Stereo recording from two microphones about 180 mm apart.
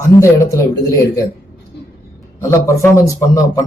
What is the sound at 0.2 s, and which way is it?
Speech, 15° left (ahead or behind).